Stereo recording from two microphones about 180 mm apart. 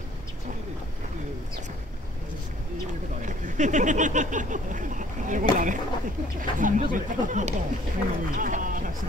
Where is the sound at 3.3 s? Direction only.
45° right (ahead or behind).